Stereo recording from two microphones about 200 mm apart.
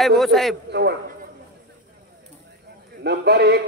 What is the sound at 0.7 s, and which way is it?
Speech, 55° right (ahead or behind).